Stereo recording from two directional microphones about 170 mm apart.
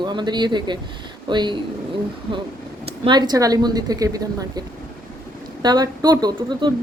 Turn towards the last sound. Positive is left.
turn(degrees=-25)  # may be behind; listen again after turning